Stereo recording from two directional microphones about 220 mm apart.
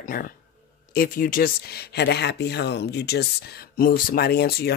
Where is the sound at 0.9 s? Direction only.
40° left (ahead or behind).